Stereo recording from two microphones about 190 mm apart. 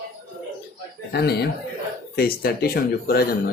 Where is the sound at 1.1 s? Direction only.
60° left (ahead or behind).